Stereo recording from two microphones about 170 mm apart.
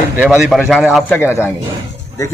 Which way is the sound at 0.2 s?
5° right (ahead or behind).